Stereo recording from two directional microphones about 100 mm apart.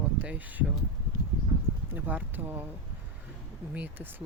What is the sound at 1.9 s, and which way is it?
Speech, 20° right (ahead or behind).